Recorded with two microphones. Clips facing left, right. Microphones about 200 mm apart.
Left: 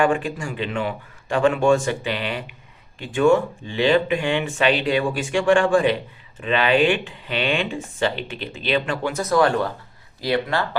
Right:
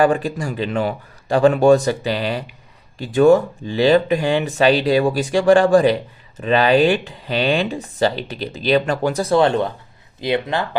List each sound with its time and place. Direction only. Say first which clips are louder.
0.0 s speech: right 4 dB; 35° right (ahead or behind); by 10.7 s 20° right (ahead or behind)